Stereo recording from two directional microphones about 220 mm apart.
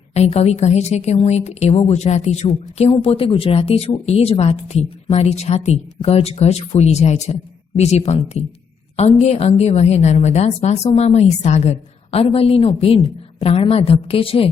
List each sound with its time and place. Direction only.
0.1 s a woman's voice: 30° left (ahead or behind)